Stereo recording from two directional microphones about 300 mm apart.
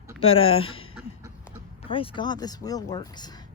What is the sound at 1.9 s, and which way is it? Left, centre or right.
Speech, centre.